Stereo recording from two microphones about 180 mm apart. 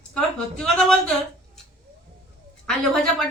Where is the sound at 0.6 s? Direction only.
5° left (ahead or behind).